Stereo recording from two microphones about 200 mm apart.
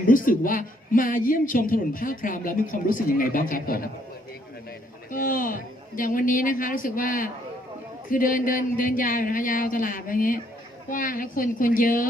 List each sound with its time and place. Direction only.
0.1 s a woman's voice: 45° left (ahead or behind)
5.1 s a woman's voice: 45° left (ahead or behind)